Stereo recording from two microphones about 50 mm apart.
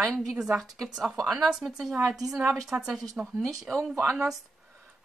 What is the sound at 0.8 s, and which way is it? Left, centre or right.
Speech, centre.